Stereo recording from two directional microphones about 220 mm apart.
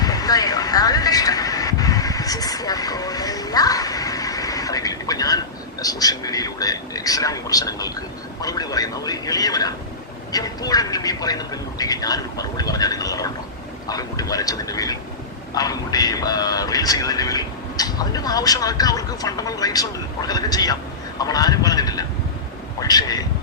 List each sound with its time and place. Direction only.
0.0 s vehicle: 15° left (ahead or behind)
5.8 s speech: 15° left (ahead or behind)